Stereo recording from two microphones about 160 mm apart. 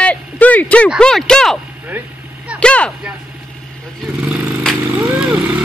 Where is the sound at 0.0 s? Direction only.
10° left (ahead or behind).